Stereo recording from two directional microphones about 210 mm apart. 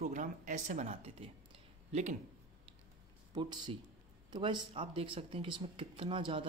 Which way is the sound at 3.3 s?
20° right (ahead or behind).